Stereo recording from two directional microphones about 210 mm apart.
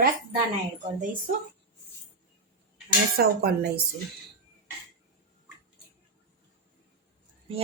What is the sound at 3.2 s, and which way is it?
Speech, 50° right (ahead or behind).